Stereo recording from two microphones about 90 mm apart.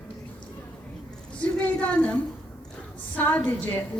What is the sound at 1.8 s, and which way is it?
A woman's voice, 15° left (ahead or behind).